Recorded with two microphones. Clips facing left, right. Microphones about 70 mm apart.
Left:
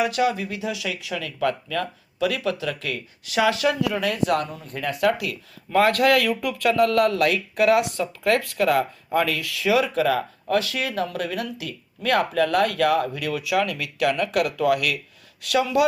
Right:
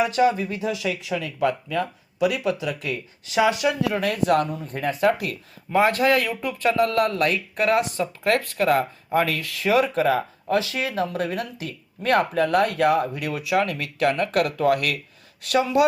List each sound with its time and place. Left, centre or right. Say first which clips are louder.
0.0 s speech: right 2 dB; right
3.8 s speech: even; right
4.6 s speech: right 1 dB; right
6.0 s speech: left 1 dB; centre
6.7 s speech: left 2 dB; right
8.0 s speech: right 1 dB; right
8.4 s speech: even; right